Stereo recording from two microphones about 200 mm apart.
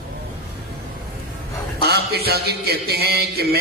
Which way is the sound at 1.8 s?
55° right (ahead or behind).